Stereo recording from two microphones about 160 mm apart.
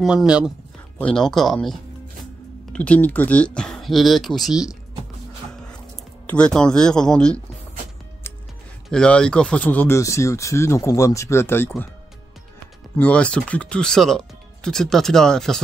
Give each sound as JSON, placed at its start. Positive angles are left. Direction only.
{"t": 0.0, "sound": "speech", "side_deg": -5}
{"t": 0.9, "sound": "speech", "side_deg": 5}
{"t": 6.2, "sound": "speech", "side_deg": 5}
{"t": 8.8, "sound": "speech", "side_deg": 5}
{"t": 12.9, "sound": "speech", "side_deg": 10}